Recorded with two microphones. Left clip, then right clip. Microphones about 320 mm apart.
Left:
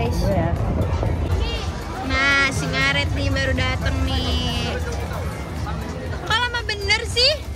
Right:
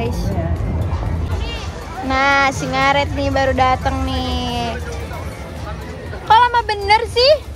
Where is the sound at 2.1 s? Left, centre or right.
Centre.